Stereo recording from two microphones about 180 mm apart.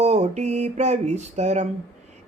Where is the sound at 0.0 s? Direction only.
40° right (ahead or behind).